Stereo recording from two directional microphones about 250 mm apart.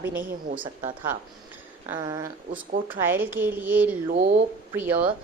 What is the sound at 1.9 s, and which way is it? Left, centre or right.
Speech, centre.